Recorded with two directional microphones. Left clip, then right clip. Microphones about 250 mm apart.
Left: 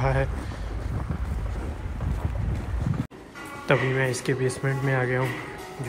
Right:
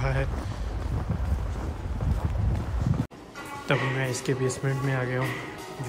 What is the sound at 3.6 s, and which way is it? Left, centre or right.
Speech, centre.